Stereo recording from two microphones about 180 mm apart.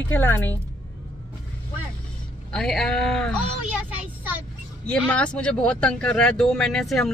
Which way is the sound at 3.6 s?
10° right (ahead or behind).